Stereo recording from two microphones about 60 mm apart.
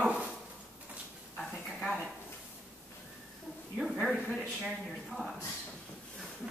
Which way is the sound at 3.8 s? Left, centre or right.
Centre.